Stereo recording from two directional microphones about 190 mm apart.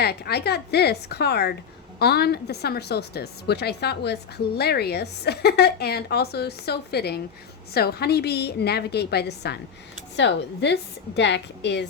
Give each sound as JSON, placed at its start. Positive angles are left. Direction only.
{"t": 0.0, "sound": "a woman's voice", "side_deg": 55}